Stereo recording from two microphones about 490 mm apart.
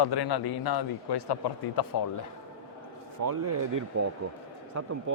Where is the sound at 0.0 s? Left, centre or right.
Left.